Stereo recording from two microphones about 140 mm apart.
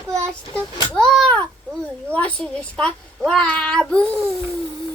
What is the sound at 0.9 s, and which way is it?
A child's voice, 5° left (ahead or behind).